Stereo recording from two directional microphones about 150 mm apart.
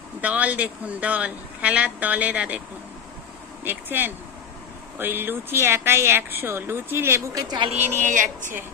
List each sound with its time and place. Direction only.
0.2 s speech: 10° right (ahead or behind)
3.6 s speech: 15° right (ahead or behind)
7.7 s speech: 50° right (ahead or behind)